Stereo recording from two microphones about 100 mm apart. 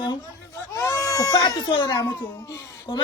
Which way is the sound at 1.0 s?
35° left (ahead or behind).